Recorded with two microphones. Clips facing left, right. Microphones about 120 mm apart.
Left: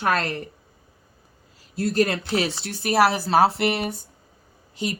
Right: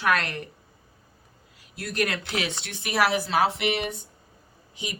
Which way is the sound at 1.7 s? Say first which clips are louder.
Left 7 dB; 30° left (ahead or behind).